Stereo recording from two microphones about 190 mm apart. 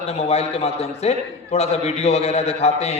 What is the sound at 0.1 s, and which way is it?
A man's voice, 35° left (ahead or behind).